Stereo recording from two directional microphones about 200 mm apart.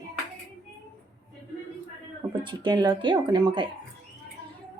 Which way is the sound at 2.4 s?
20° right (ahead or behind).